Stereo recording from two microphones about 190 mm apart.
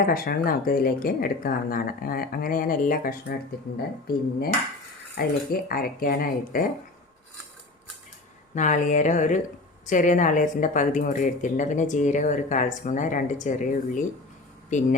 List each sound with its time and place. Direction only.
0.0 s speech: 50° left (ahead or behind)
5.1 s speech: 50° left (ahead or behind)
8.5 s speech: 40° left (ahead or behind)